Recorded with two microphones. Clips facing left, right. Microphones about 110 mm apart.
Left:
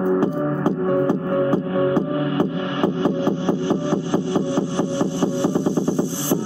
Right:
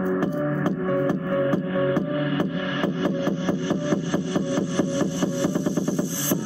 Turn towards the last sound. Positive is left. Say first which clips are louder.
# left 4 dB
turn(degrees=20)  # may be behind; listen again after turning